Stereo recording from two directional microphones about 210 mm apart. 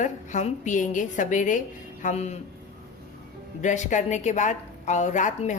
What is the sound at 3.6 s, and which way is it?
A woman's voice, 35° left (ahead or behind).